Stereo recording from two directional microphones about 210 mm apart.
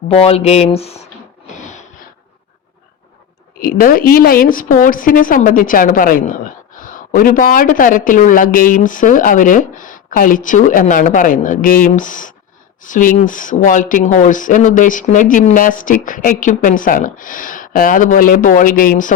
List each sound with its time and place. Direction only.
0.1 s speech: 30° left (ahead or behind)
3.6 s a woman's voice: 45° left (ahead or behind)